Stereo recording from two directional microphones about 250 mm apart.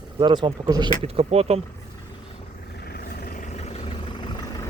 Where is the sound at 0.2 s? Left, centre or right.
Centre.